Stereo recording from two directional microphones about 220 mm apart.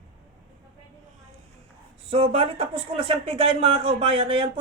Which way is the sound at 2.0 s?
25° right (ahead or behind).